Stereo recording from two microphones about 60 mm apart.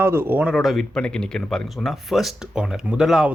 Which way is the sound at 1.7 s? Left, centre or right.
Centre.